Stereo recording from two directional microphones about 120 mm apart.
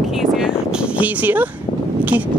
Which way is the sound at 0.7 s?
10° right (ahead or behind).